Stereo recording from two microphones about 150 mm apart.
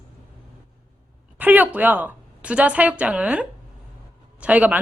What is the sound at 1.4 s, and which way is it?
A woman's voice, 10° right (ahead or behind).